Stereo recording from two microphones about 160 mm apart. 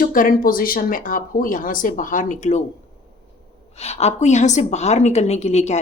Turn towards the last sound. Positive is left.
turn(degrees=45)  # may be behind; listen again after turning